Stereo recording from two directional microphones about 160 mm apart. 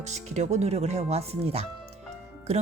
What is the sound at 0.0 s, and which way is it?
Speech, 45° right (ahead or behind).